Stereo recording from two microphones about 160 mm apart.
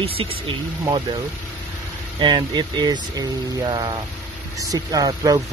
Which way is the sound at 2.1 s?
30° right (ahead or behind).